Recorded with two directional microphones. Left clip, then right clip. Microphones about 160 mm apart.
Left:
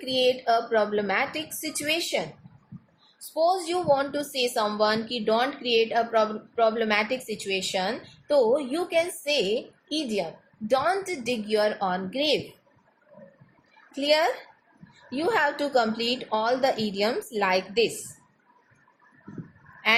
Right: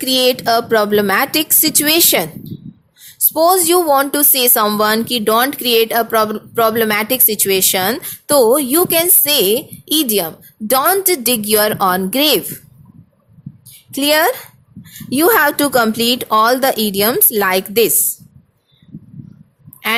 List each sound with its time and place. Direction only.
0.0 s a woman's voice: 80° right
3.3 s a woman's voice: 90° right
13.9 s a woman's voice: 70° right (ahead or behind)